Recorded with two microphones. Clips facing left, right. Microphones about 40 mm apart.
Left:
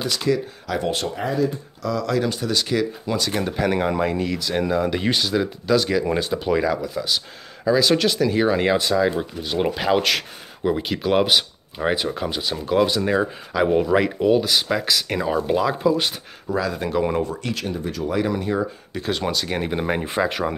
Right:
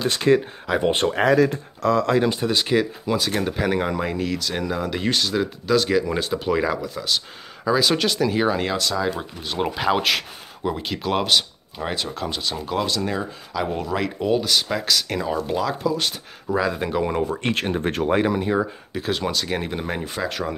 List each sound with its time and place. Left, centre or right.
0.0 s speech: right
0.7 s speech: right
1.1 s speech: right
1.8 s speech: right; by 2.9 s centre
3.1 s speech: centre
16.5 s speech: centre
17.4 s speech: right
18.3 s speech: centre
18.9 s speech: centre